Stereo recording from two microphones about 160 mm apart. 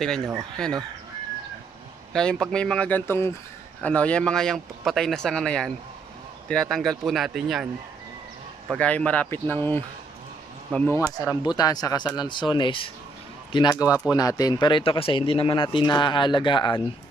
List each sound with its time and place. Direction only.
0.6 s speech: 5° left (ahead or behind)
2.1 s speech: 5° left (ahead or behind)
8.7 s speech: 10° left (ahead or behind); by 16.7 s 30° left (ahead or behind)